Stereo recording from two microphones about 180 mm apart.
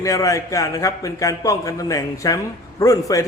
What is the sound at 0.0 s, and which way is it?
A man's voice, 20° left (ahead or behind).